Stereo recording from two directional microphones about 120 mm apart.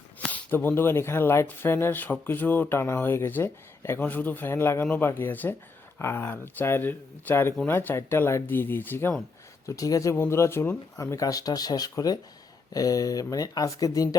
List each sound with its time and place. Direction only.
0.3 s speech: 15° left (ahead or behind)
9.6 s speech: 30° left (ahead or behind)